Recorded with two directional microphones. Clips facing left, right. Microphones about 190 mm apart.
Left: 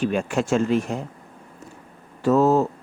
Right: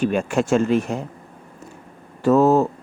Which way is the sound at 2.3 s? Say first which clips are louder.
Right 2 dB; 55° right (ahead or behind).